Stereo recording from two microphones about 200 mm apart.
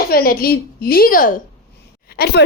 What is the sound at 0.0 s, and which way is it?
A woman's voice, 50° left (ahead or behind).